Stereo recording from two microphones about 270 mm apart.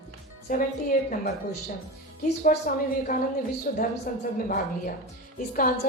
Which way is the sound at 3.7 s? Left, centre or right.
Left.